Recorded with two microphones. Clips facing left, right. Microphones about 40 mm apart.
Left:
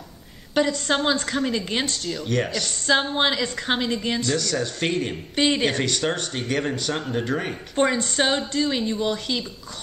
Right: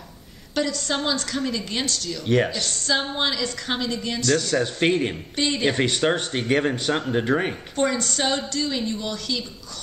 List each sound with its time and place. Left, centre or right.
0.6 s a woman's voice: left
2.2 s speech: centre
2.9 s a woman's voice: left
4.4 s speech: centre
5.3 s a woman's voice: left
5.7 s speech: centre
7.7 s a woman's voice: left